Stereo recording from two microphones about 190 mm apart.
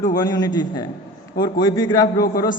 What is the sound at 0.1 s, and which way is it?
A man's voice, 20° left (ahead or behind).